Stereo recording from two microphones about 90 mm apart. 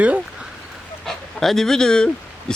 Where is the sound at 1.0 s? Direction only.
5° left (ahead or behind).